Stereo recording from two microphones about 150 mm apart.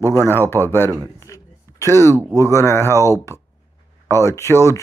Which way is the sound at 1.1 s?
20° left (ahead or behind).